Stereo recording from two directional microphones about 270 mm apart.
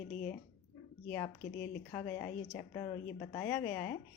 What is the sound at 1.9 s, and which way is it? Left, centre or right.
A woman's voice, centre.